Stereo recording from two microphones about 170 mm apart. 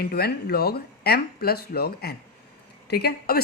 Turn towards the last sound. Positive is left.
turn(degrees=65)  # may be behind; listen again after turning